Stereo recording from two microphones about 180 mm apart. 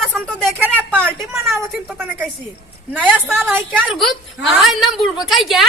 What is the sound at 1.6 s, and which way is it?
A woman's voice, 10° right (ahead or behind).